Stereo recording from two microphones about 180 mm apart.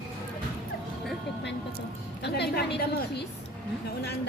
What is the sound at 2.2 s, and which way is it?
A woman's voice, 65° left (ahead or behind).